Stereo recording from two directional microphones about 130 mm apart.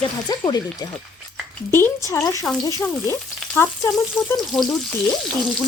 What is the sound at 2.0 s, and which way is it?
A woman's voice, 25° left (ahead or behind).